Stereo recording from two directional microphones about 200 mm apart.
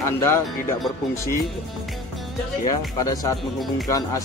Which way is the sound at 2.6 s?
20° left (ahead or behind).